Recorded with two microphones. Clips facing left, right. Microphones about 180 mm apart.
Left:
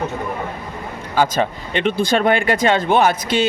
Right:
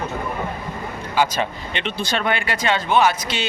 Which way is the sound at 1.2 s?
45° left (ahead or behind).